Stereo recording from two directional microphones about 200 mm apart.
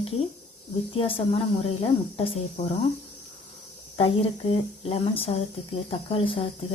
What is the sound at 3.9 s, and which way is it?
A woman's voice, 30° left (ahead or behind).